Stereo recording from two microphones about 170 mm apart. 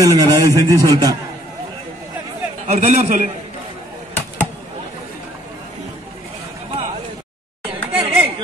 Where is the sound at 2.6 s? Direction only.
45° right (ahead or behind).